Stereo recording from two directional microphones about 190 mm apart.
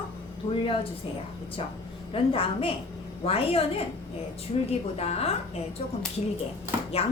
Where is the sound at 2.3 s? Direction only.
30° left (ahead or behind).